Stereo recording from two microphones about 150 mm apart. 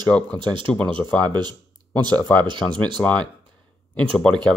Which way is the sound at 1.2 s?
30° right (ahead or behind).